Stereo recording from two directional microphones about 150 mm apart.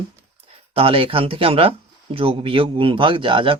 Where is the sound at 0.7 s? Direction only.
40° right (ahead or behind).